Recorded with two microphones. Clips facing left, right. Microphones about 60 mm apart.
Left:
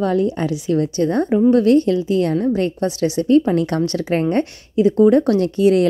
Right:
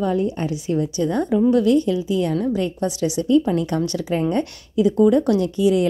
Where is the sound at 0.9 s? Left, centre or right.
Left.